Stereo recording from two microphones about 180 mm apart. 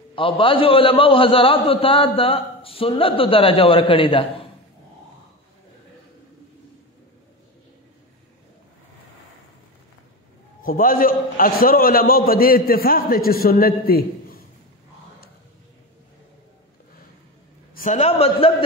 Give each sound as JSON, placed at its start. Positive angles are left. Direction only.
{"t": 0.1, "sound": "a man's voice", "side_deg": 30}
{"t": 10.6, "sound": "a man's voice", "side_deg": 50}
{"t": 17.7, "sound": "a man's voice", "side_deg": 40}